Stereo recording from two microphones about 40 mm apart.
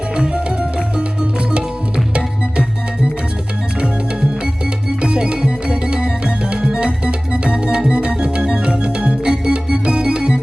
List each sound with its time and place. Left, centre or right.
0.2 s music: right
2.1 s music: right
4.9 s music: right